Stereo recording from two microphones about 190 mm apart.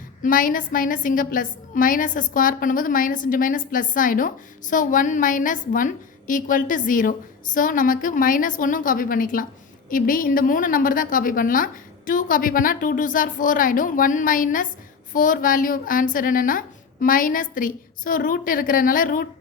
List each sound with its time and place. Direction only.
0.2 s a woman's voice: 45° left (ahead or behind)